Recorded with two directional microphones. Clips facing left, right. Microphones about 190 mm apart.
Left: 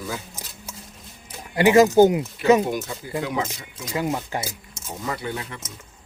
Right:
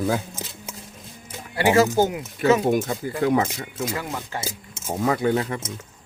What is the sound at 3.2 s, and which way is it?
Speech, 50° right (ahead or behind).